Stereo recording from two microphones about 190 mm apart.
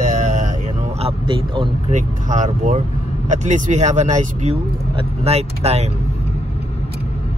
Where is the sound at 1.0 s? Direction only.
30° right (ahead or behind).